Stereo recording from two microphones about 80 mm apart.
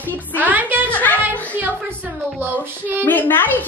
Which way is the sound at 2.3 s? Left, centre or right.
Right.